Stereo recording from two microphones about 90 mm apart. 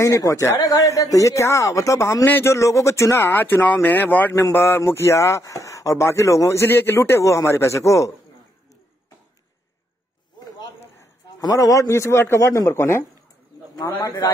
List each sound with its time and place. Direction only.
0.0 s speech: 35° left (ahead or behind)
11.0 s a sound: 40° left (ahead or behind)
11.8 s speech: 30° left (ahead or behind)